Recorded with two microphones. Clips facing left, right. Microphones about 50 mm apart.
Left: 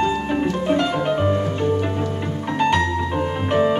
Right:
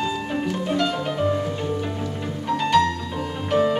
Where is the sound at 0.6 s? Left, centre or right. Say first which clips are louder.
Left 3 dB; left.